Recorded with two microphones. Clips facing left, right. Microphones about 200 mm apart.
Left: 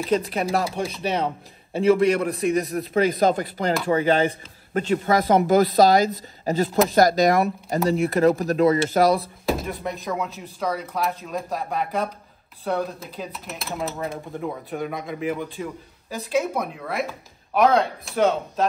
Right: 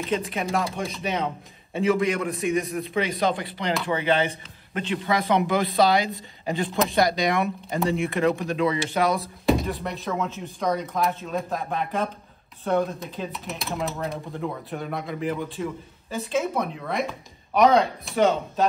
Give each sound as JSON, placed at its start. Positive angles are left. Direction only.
{"t": 0.3, "sound": "speech", "side_deg": 35}
{"t": 0.8, "sound": "a man's voice", "side_deg": 0}
{"t": 2.0, "sound": "speech", "side_deg": 35}
{"t": 2.2, "sound": "speech", "side_deg": 0}
{"t": 2.9, "sound": "speech", "side_deg": 45}
{"t": 9.2, "sound": "speech", "side_deg": 0}